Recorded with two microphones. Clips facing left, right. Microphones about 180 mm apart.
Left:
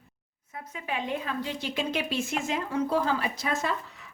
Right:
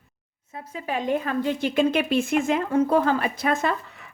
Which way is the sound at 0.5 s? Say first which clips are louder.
Right 5 dB; 35° right (ahead or behind).